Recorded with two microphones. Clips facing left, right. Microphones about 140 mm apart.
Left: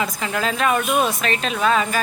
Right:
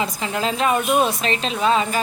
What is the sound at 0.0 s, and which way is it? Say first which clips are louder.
A woman's voice: even; 25° right (ahead or behind).